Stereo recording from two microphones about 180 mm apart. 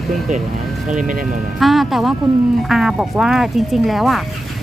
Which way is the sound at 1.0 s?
45° right (ahead or behind).